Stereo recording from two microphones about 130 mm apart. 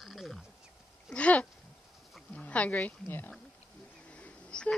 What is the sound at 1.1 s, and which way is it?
Speech, 10° left (ahead or behind).